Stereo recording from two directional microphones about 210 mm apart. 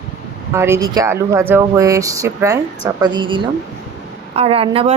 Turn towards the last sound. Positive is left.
turn(degrees=-25)  # may be behind; listen again after turning